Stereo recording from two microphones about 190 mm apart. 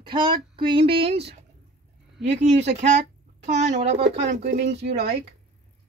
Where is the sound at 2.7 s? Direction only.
35° right (ahead or behind).